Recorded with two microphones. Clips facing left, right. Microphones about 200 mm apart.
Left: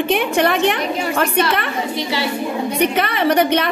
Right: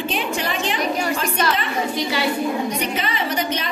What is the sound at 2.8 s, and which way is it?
Speech, 60° left (ahead or behind).